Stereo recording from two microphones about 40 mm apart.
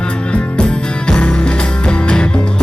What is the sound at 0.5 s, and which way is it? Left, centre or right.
Music, left.